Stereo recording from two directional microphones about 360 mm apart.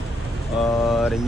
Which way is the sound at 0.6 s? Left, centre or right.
Centre.